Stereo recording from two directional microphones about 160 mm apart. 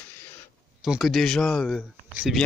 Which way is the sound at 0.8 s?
Centre (ahead or behind).